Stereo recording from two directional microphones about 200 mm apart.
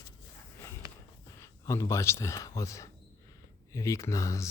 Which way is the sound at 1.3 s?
15° left (ahead or behind).